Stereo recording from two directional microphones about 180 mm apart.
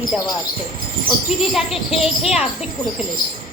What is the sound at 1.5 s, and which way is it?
Speech, centre (ahead or behind).